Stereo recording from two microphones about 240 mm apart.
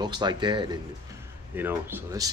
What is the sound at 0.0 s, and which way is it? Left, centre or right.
Speech, centre.